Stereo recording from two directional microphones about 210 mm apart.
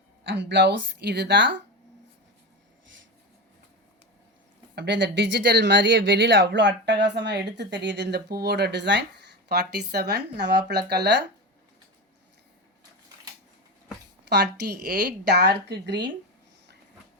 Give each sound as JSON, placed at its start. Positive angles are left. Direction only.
{"t": 0.3, "sound": "speech", "side_deg": -55}
{"t": 4.7, "sound": "speech", "side_deg": -55}
{"t": 14.3, "sound": "speech", "side_deg": -50}